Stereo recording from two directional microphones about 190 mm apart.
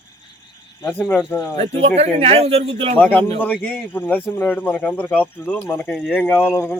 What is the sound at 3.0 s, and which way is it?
A man's voice, 10° left (ahead or behind).